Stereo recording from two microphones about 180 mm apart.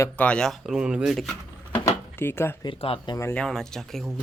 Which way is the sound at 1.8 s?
15° left (ahead or behind).